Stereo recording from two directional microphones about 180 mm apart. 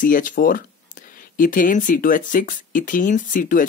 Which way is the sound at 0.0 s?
45° left (ahead or behind).